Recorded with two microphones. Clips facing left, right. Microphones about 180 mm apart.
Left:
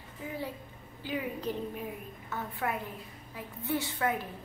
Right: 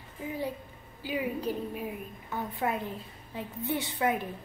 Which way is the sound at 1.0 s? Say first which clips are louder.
Right 3 dB; 10° right (ahead or behind).